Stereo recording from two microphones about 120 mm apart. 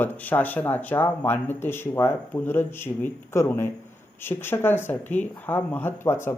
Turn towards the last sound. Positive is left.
turn(degrees=20)  # may be behind; listen again after turning